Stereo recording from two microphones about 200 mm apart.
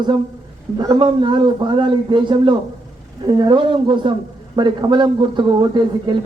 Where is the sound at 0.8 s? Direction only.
20° right (ahead or behind).